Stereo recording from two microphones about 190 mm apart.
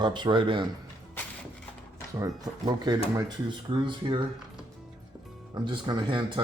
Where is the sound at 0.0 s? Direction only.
25° right (ahead or behind).